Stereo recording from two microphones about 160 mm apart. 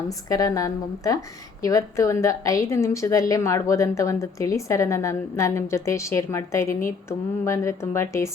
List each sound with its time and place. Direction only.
0.1 s a woman's voice: 20° left (ahead or behind)